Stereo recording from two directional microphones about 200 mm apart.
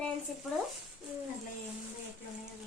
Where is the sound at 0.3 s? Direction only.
Centre (ahead or behind).